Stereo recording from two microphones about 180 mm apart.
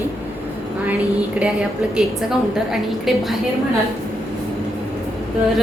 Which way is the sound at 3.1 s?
Centre (ahead or behind).